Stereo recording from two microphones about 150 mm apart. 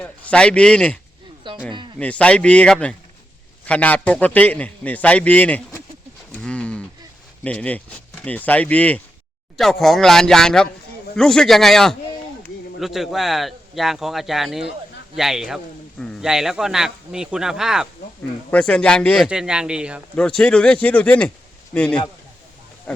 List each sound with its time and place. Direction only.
0.0 s a man's voice: 5° left (ahead or behind)
1.5 s a sound: 30° right (ahead or behind)
2.0 s a man's voice: 10° left (ahead or behind)
6.3 s bird: 5° left (ahead or behind)
7.4 s a man's voice: 10° left (ahead or behind)
19.3 s speech: 5° right (ahead or behind)
20.1 s a man's voice: 5° left (ahead or behind)